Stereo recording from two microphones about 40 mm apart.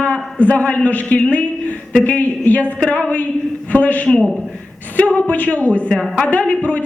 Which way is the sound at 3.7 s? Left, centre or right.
Left.